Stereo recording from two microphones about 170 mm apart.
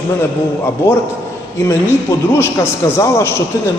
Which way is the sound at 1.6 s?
15° left (ahead or behind).